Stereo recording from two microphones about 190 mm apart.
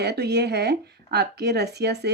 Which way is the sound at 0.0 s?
60° right (ahead or behind).